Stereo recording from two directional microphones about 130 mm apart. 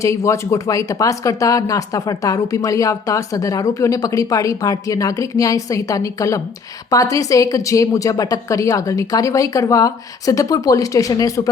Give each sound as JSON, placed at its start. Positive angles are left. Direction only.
{"t": 0.0, "sound": "speech", "side_deg": 25}